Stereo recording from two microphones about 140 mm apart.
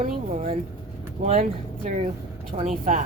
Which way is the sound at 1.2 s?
55° right (ahead or behind).